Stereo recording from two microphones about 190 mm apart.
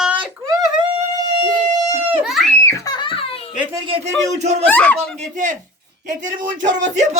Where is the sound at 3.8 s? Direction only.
30° right (ahead or behind).